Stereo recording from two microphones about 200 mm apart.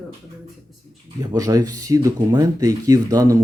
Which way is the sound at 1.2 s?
20° right (ahead or behind).